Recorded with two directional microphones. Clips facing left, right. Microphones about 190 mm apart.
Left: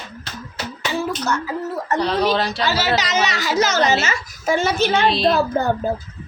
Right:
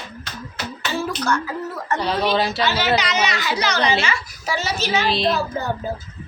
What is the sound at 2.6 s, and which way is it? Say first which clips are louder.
A woman's voice: even; 40° left (ahead or behind).